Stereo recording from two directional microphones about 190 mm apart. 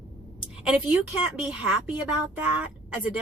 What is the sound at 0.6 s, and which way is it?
A woman's voice, 5° right (ahead or behind).